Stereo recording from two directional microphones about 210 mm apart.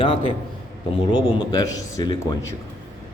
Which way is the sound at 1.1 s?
20° left (ahead or behind).